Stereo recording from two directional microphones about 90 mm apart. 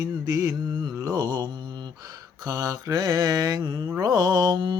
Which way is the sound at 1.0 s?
45° right (ahead or behind).